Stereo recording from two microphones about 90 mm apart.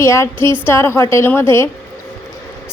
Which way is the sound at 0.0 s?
35° left (ahead or behind).